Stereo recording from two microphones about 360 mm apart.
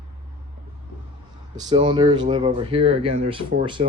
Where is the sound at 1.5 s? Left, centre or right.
Centre.